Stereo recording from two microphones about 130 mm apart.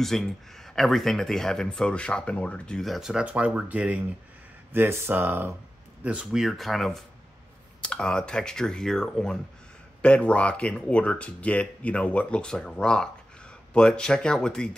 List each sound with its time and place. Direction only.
0.0 s speech: 5° left (ahead or behind); by 5.6 s 15° right (ahead or behind)
6.0 s speech: 5° right (ahead or behind)